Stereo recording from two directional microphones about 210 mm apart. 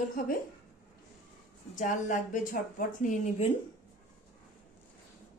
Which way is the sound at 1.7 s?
35° left (ahead or behind).